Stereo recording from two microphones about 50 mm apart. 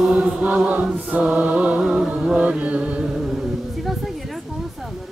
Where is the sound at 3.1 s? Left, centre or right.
Centre.